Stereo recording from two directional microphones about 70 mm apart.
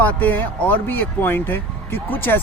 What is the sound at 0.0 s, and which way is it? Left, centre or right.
Speech, left.